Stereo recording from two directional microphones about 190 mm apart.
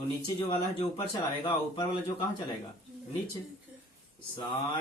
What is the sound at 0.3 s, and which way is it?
Speech, 25° left (ahead or behind).